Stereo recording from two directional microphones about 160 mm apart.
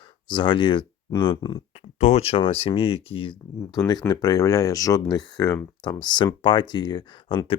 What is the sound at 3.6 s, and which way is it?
Speech, 20° left (ahead or behind).